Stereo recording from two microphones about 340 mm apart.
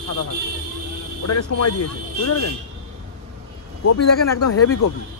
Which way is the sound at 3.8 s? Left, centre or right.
Left.